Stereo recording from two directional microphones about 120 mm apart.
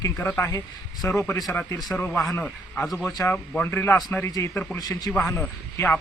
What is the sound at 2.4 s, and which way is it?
A man's voice, 5° left (ahead or behind).